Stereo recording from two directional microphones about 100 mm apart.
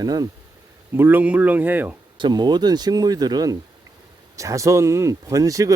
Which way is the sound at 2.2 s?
50° right (ahead or behind).